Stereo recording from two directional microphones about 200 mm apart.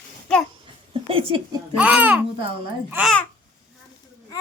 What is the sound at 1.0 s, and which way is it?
Speech, 25° right (ahead or behind).